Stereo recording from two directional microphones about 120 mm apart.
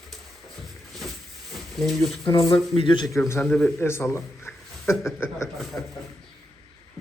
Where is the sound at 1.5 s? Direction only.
Centre (ahead or behind).